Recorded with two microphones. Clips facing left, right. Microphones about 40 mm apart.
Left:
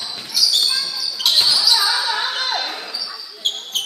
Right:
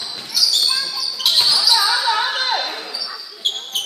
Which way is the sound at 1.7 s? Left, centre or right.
Right.